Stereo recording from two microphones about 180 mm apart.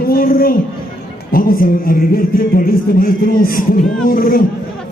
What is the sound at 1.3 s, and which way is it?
A man's voice, 50° left (ahead or behind).